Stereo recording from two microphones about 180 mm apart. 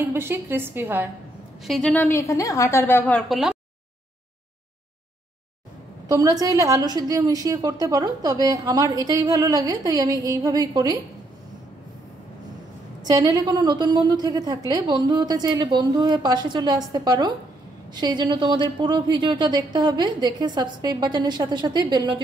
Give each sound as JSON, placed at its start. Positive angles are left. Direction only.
{"t": 0.0, "sound": "a woman's voice", "side_deg": -15}
{"t": 1.6, "sound": "a woman's voice", "side_deg": 0}
{"t": 6.0, "sound": "a woman's voice", "side_deg": -20}
{"t": 13.0, "sound": "a woman's voice", "side_deg": -20}